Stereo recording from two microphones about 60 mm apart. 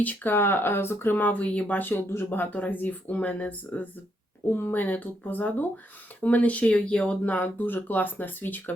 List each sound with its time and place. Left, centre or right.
0.0 s speech: left
1.3 s speech: left
1.9 s speech: left
4.5 s speech: left; by 7.2 s centre
7.3 s speech: left